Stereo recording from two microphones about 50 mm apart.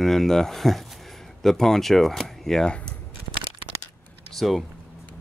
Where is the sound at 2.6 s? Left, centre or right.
Centre.